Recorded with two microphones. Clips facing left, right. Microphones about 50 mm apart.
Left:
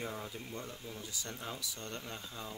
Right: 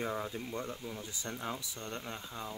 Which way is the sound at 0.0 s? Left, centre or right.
Right.